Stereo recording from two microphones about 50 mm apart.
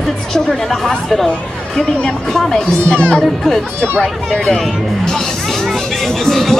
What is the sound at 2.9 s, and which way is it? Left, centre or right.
Speech, left.